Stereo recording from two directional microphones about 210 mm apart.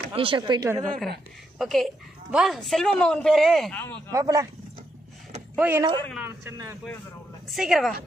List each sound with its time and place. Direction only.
0.1 s speech: 25° right (ahead or behind)
0.8 s speech: centre (ahead or behind)
4.1 s a man's voice: 15° right (ahead or behind)
5.6 s a man's voice: 10° right (ahead or behind)
7.4 s speech: centre (ahead or behind)